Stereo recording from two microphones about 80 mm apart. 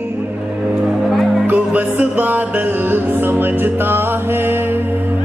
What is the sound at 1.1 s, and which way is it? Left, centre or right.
Music, centre.